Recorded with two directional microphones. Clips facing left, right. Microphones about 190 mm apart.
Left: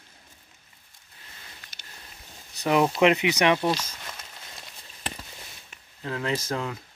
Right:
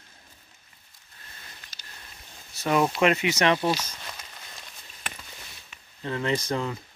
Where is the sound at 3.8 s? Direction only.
5° left (ahead or behind).